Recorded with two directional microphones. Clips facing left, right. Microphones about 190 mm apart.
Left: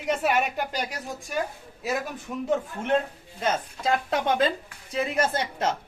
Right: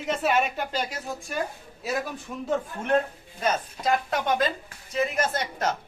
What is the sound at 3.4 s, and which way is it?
A woman's voice, 30° left (ahead or behind).